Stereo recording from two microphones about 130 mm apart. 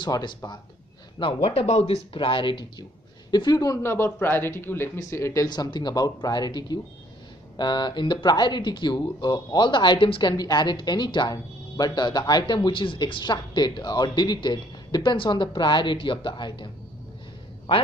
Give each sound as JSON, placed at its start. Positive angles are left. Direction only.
{"t": 0.0, "sound": "a woman's voice", "side_deg": 30}
{"t": 1.2, "sound": "speech", "side_deg": 50}
{"t": 2.1, "sound": "a woman's voice", "side_deg": 40}
{"t": 10.3, "sound": "a woman's voice", "side_deg": 30}